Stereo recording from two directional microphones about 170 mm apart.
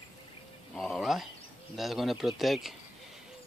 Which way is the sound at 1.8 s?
Centre (ahead or behind).